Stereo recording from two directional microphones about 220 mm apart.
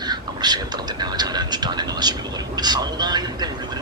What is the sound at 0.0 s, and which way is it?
Speech, 20° right (ahead or behind).